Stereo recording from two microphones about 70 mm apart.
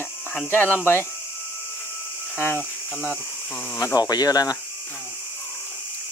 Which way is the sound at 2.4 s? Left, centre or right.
Left.